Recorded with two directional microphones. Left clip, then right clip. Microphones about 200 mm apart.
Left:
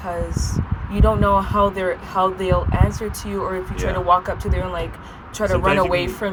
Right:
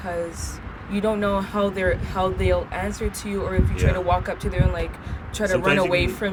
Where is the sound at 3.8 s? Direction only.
20° right (ahead or behind).